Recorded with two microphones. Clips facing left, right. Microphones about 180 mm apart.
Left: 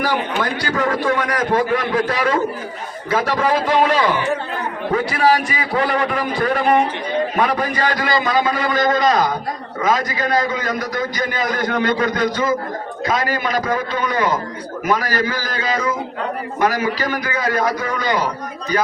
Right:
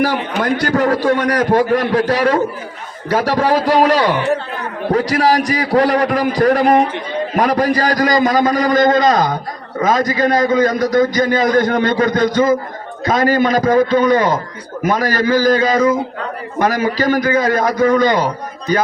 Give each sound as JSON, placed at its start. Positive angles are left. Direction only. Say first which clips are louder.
{"t": 0.8, "sound": "a man's voice", "louder": "right 3 dB", "side_deg": -35}